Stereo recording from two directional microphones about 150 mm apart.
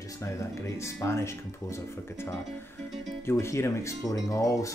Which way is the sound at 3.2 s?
20° left (ahead or behind).